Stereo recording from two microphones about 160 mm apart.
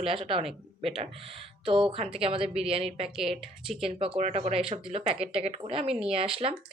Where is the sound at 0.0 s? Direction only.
35° right (ahead or behind).